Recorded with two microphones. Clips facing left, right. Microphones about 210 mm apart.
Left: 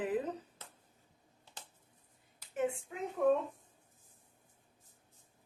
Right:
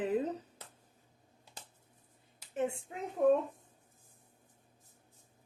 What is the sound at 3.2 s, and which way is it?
Speech, 30° right (ahead or behind).